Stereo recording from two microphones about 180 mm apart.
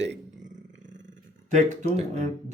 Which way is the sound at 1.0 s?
45° right (ahead or behind).